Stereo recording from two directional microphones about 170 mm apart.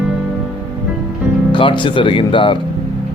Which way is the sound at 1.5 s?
30° left (ahead or behind).